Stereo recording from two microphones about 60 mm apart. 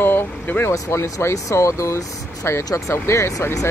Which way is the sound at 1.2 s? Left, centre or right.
Left.